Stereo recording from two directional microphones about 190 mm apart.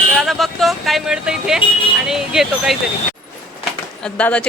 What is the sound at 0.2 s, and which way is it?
Speech, centre (ahead or behind).